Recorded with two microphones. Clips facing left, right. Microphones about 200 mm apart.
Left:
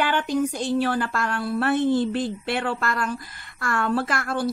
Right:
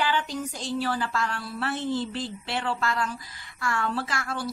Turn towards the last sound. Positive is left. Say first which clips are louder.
# left 6 dB
turn(degrees=55)  # may be behind; listen again after turning